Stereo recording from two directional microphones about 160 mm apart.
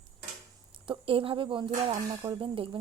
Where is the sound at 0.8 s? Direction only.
35° right (ahead or behind).